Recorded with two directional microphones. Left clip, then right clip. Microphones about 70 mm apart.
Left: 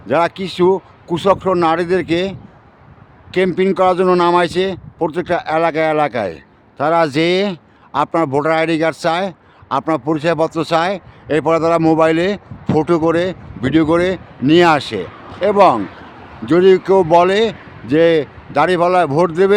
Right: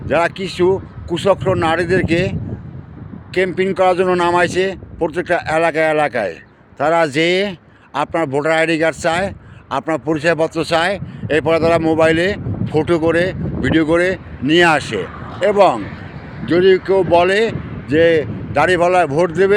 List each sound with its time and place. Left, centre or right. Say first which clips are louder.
0.1 s a man's voice: left 1 dB; left
3.3 s a man's voice: left 1 dB; left
15.4 s a man's voice: left 1 dB; left
16.5 s a man's voice: left 2 dB; left